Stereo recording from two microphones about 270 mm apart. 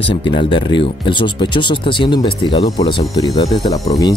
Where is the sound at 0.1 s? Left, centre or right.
Centre.